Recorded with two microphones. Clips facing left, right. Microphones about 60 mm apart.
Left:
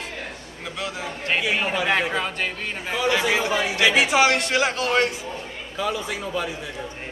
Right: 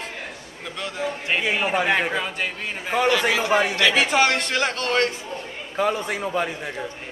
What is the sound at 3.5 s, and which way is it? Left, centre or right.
Speech, right.